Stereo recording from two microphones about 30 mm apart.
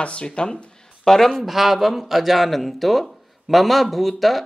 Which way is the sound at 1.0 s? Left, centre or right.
Centre.